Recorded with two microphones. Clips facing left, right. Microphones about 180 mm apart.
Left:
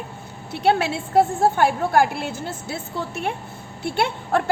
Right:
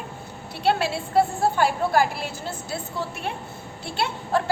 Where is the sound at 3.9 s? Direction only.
55° left (ahead or behind).